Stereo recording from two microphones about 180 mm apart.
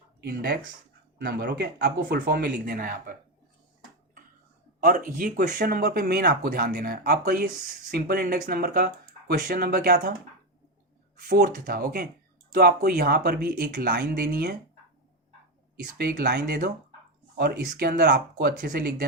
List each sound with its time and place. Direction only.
0.2 s speech: 60° right (ahead or behind)
4.8 s speech: 45° right (ahead or behind)
11.2 s speech: 60° right (ahead or behind)
15.8 s speech: 60° right (ahead or behind)